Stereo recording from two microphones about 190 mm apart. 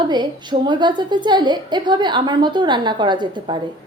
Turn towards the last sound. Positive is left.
turn(degrees=-25)  # may be behind; listen again after turning